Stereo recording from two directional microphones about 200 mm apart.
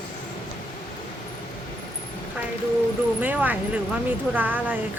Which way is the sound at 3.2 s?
10° right (ahead or behind).